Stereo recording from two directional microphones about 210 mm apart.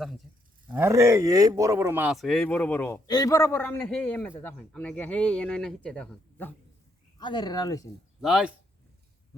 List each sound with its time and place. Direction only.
0.7 s speech: 10° right (ahead or behind); by 6.5 s 5° left (ahead or behind)
7.2 s speech: 20° left (ahead or behind)
8.2 s speech: centre (ahead or behind)